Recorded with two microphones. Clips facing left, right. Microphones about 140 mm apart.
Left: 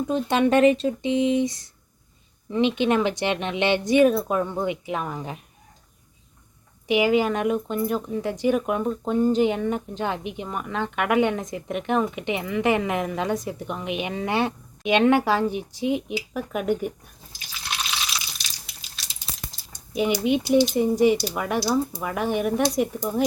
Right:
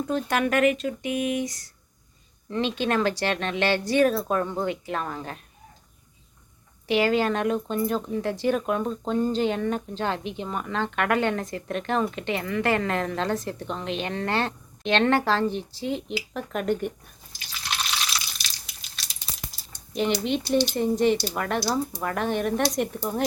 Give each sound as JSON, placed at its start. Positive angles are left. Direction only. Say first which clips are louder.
{"t": 0.1, "sound": "speech", "louder": "left 5 dB", "side_deg": 20}
{"t": 6.8, "sound": "speech", "louder": "left 2 dB", "side_deg": 15}
{"t": 19.3, "sound": "a sound", "louder": "left 2 dB", "side_deg": 0}
{"t": 19.9, "sound": "speech", "louder": "left 3 dB", "side_deg": 10}